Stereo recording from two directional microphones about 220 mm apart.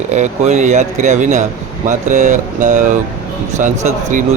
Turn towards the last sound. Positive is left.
turn(degrees=-35)  # may be behind; listen again after turning